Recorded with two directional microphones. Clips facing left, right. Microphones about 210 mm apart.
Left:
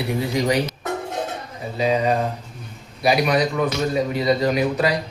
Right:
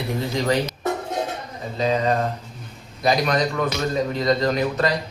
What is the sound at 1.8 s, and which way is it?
A man's voice, 10° left (ahead or behind).